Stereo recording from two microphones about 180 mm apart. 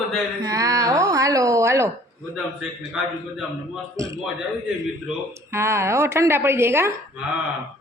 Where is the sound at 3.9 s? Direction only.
15° right (ahead or behind).